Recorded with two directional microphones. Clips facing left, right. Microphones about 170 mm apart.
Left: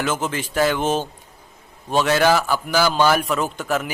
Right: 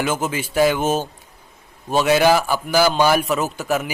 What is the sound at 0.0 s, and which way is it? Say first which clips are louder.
A man's voice: right 1 dB; 10° right (ahead or behind).